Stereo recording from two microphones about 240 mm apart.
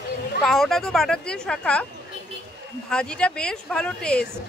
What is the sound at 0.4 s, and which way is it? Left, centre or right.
Speech, centre.